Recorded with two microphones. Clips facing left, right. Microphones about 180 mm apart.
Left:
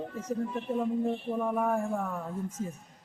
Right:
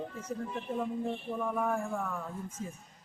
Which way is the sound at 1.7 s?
40° left (ahead or behind).